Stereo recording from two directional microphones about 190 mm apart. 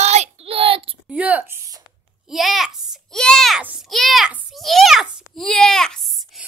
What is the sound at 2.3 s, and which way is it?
Speech, centre (ahead or behind).